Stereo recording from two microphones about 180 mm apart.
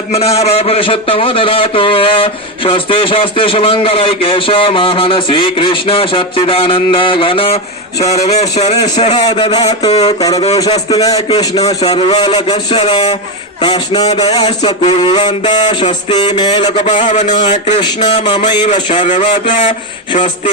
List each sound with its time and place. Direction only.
0.1 s a man's voice: 35° left (ahead or behind)
8.0 s a sound: 40° left (ahead or behind)
9.2 s a man's voice: 25° left (ahead or behind)
9.8 s a sound: 35° left (ahead or behind)
10.7 s a man's voice: 30° left (ahead or behind)
11.8 s a man's voice: 30° left (ahead or behind)
17.1 s a sound: 40° left (ahead or behind)
17.7 s a man's voice: 25° left (ahead or behind)
18.9 s speech: 45° left (ahead or behind)